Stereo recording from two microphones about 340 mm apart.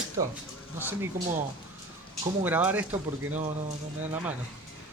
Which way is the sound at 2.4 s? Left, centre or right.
Centre.